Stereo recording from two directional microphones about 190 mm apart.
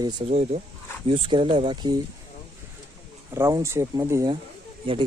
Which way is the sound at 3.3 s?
15° right (ahead or behind).